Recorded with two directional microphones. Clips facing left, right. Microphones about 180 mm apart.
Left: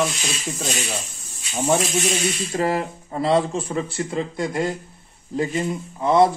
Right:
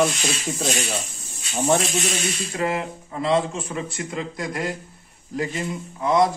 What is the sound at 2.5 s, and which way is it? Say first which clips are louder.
Speech: left 2 dB; 35° left (ahead or behind).